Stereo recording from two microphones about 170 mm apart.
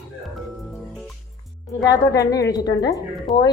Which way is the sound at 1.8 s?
20° left (ahead or behind).